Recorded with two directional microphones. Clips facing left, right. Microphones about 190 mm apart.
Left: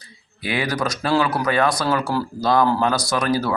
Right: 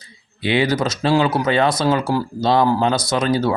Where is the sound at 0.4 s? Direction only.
25° right (ahead or behind).